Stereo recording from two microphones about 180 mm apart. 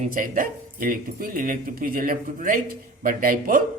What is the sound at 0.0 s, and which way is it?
Speech, 50° right (ahead or behind).